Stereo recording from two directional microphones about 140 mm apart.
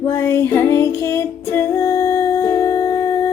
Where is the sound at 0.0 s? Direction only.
20° left (ahead or behind).